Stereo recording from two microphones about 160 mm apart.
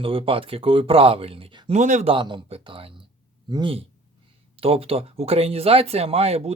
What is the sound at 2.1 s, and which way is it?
Speech, 30° right (ahead or behind).